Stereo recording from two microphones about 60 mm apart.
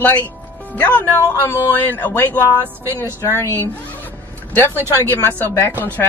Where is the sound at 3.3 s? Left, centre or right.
Left.